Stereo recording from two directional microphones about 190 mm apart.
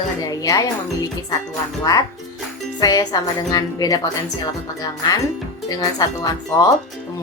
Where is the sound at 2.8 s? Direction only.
20° left (ahead or behind).